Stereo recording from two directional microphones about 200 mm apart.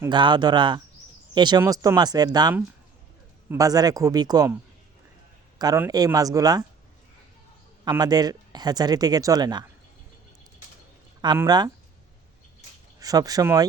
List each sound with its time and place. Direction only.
0.0 s speech: 25° right (ahead or behind)
5.5 s speech: 15° right (ahead or behind)
7.9 s speech: 20° right (ahead or behind)
11.3 s speech: 20° right (ahead or behind)
13.0 s speech: 20° right (ahead or behind)